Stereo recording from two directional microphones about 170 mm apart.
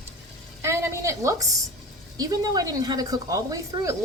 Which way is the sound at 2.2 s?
20° right (ahead or behind).